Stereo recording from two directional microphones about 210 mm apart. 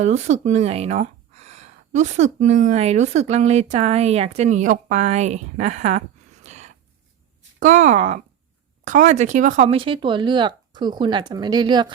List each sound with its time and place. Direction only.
0.0 s speech: 35° right (ahead or behind)
6.4 s a sound: 35° right (ahead or behind)
7.6 s speech: 35° right (ahead or behind); by 11.9 s 20° right (ahead or behind)